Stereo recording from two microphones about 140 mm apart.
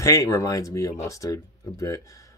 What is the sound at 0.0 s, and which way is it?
Speech, 20° left (ahead or behind).